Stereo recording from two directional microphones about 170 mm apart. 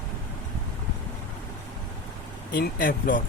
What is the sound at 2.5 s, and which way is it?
Speech, 60° left (ahead or behind).